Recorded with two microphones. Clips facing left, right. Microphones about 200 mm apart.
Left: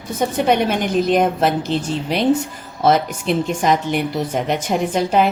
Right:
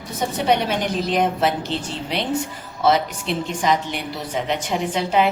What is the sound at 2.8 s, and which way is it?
A woman's voice, 45° left (ahead or behind).